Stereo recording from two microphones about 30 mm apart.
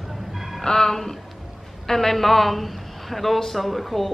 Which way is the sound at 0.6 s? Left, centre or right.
Left.